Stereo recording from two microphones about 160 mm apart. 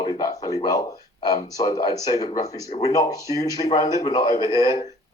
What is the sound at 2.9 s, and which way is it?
A man's voice, 20° left (ahead or behind).